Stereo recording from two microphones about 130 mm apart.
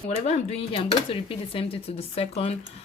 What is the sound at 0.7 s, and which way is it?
Speech, 40° left (ahead or behind).